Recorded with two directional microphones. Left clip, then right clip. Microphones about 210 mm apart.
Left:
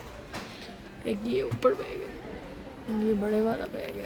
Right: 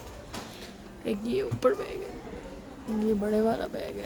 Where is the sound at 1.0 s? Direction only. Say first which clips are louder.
Even; centre (ahead or behind).